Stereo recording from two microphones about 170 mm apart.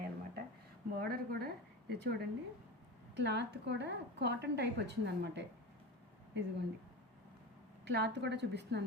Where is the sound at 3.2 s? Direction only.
90° right.